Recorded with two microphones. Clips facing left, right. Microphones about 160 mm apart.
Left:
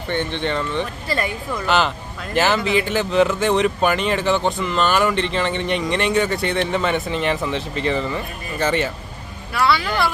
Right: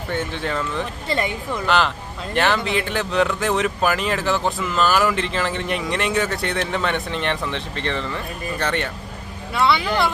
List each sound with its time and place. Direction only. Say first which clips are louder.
0.1 s speech: left 3 dB; 5° right (ahead or behind)
1.0 s speech: right 3 dB; 20° right (ahead or behind)
1.6 s speech: left 1 dB; centre (ahead or behind)
9.6 s speech: even; 20° right (ahead or behind)